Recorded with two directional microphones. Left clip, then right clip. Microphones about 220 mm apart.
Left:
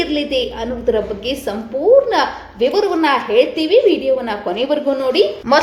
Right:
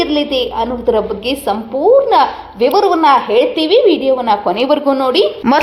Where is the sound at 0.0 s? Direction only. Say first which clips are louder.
Right 3 dB; 20° right (ahead or behind).